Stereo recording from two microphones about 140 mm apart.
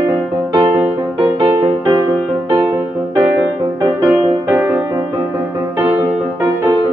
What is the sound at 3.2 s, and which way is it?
Music, 10° right (ahead or behind).